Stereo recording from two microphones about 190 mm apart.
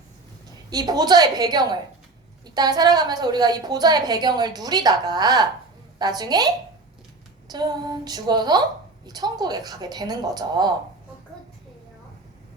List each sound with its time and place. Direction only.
0.7 s a woman's voice: 20° right (ahead or behind)